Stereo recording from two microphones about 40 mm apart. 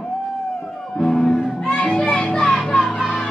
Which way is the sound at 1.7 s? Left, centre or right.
Left.